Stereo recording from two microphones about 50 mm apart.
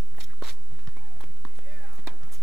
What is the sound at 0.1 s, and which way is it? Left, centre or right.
Walk, centre.